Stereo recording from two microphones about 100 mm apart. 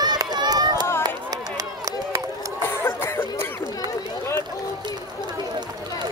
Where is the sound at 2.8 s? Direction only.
25° left (ahead or behind).